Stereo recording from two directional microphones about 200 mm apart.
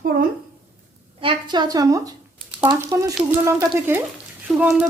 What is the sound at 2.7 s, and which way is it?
Speech, 15° right (ahead or behind).